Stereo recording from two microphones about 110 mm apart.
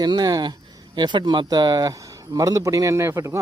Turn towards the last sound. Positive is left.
turn(degrees=-25)  # may be behind; listen again after turning